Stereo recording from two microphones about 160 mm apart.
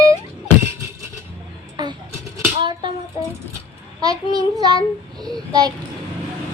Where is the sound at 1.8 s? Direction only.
25° right (ahead or behind).